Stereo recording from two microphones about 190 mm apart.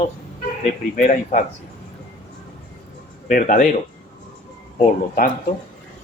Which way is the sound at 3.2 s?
45° left (ahead or behind).